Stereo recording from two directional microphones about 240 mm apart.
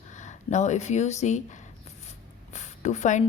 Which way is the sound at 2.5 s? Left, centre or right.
Left.